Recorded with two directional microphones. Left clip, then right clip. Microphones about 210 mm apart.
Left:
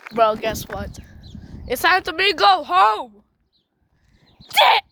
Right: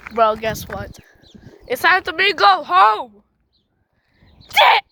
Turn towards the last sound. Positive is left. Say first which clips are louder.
# right 2 dB
turn(degrees=-5)  # may be behind; listen again after turning